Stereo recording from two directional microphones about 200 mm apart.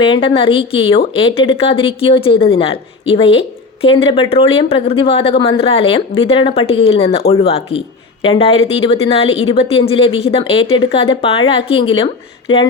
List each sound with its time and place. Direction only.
0.0 s speech: 25° left (ahead or behind)